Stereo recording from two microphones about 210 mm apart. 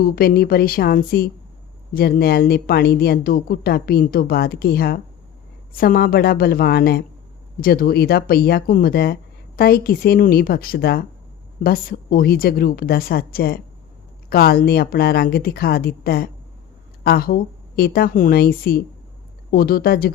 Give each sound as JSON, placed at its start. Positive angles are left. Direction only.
{"t": 0.0, "sound": "a woman's voice", "side_deg": 45}